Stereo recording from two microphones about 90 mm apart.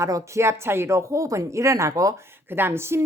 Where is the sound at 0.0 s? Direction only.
35° right (ahead or behind).